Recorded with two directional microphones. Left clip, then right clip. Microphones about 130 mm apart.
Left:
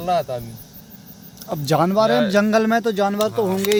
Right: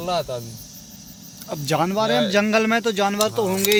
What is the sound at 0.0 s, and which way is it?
Speech, 25° right (ahead or behind).